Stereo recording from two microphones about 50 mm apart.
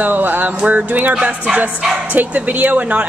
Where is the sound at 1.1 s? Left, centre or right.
Centre.